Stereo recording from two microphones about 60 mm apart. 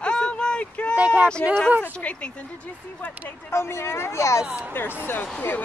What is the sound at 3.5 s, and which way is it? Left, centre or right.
Speech, left.